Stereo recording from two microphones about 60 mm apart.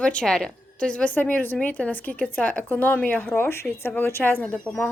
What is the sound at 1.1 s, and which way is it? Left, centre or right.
Speech, left.